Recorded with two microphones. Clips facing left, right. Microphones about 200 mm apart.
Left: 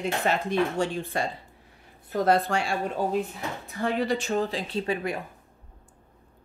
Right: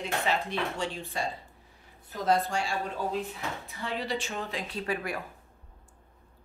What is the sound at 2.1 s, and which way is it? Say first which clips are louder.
Speech: left 4 dB; 65° left (ahead or behind).